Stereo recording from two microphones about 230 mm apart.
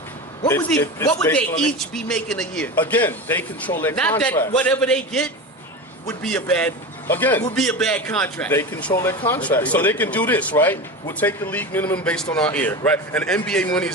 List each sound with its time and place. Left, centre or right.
0.4 s a man's voice: centre